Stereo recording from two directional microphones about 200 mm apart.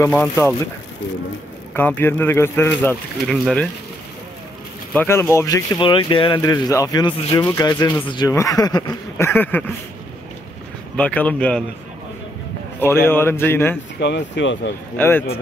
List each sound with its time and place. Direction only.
0.0 s speech: 10° left (ahead or behind)
1.7 s speech: 10° left (ahead or behind)
4.9 s speech: 10° left (ahead or behind)
5.8 s speech: 25° left (ahead or behind)
11.0 s speech: 5° left (ahead or behind)
12.8 s speech: 10° left (ahead or behind)
13.9 s speech: 55° left (ahead or behind)
15.0 s speech: 10° left (ahead or behind)